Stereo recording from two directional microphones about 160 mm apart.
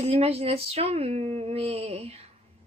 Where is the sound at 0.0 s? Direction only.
40° right (ahead or behind).